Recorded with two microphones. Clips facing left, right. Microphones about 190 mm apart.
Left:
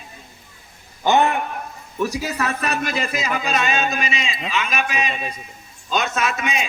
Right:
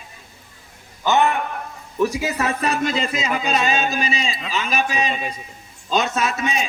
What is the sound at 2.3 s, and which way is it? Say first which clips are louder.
A man's voice: right 2 dB; 25° right (ahead or behind).